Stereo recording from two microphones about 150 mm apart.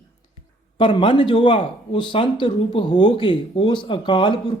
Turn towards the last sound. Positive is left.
turn(degrees=30)  # may be behind; listen again after turning